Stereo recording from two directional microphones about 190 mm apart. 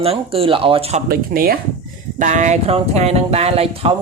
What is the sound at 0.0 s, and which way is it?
Speech, 30° right (ahead or behind).